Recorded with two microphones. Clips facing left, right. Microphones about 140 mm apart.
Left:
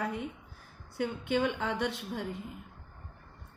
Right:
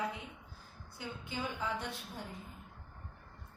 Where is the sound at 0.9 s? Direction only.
75° left (ahead or behind); by 2.4 s 90° left.